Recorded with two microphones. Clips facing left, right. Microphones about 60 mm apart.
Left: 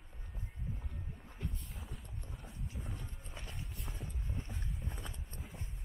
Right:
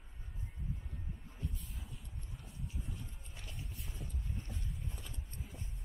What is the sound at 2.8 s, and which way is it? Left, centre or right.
Music, left.